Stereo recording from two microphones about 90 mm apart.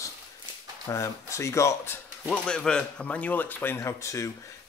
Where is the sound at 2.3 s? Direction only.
10° left (ahead or behind).